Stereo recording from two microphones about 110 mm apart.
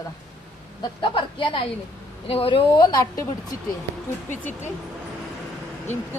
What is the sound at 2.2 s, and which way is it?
A woman's voice, 60° left (ahead or behind).